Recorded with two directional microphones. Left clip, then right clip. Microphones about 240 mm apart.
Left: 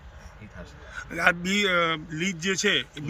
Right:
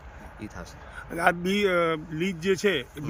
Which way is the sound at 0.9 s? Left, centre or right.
Centre.